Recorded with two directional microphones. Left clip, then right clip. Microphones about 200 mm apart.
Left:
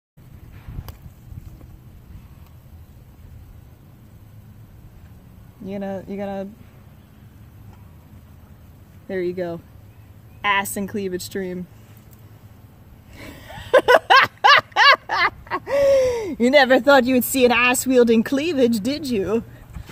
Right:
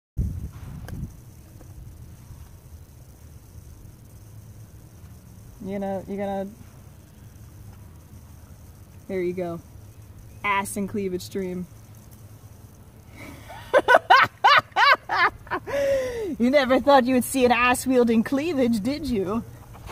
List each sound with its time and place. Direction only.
5.7 s speech: 5° left (ahead or behind)
9.0 s speech: 10° left (ahead or behind)
13.1 s a sound: 10° left (ahead or behind)
16.3 s speech: 45° left (ahead or behind)
16.7 s speech: 10° left (ahead or behind)